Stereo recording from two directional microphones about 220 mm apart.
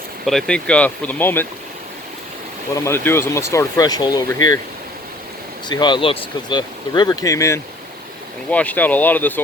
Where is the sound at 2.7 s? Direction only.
10° left (ahead or behind).